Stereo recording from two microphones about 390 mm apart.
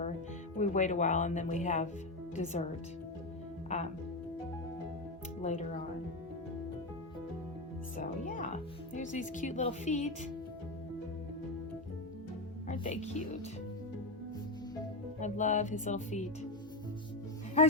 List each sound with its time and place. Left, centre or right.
0.6 s speech: centre
3.7 s speech: centre
5.4 s speech: centre
9.0 s speech: centre
12.6 s speech: centre
15.2 s music: centre